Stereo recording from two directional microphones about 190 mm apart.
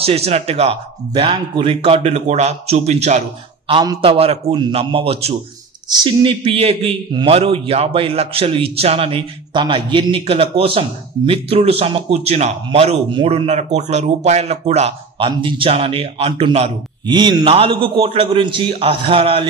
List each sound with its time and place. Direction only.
0.0 s a man's voice: 30° right (ahead or behind)